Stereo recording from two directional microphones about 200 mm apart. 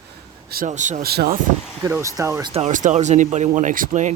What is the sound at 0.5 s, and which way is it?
Speech, 40° right (ahead or behind).